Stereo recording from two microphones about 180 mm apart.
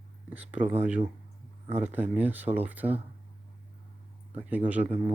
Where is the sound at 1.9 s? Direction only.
10° right (ahead or behind).